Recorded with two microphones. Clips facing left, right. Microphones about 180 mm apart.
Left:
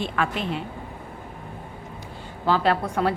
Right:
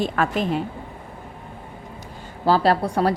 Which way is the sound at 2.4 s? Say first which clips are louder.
Right 3 dB; 35° right (ahead or behind).